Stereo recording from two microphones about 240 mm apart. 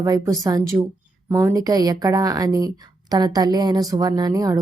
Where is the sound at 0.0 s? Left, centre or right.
Centre.